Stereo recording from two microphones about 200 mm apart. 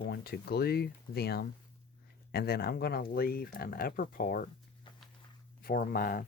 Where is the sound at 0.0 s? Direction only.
50° left (ahead or behind).